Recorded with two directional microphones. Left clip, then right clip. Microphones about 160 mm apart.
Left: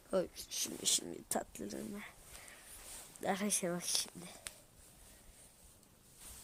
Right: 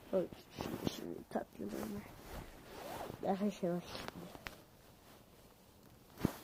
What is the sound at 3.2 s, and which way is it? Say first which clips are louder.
Speech: left 1 dB; 10° left (ahead or behind).